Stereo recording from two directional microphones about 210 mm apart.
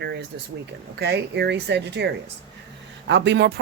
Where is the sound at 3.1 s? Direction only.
55° right (ahead or behind).